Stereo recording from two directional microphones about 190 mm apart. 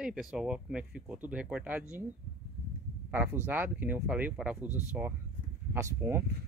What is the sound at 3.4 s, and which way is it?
Speech, 10° right (ahead or behind).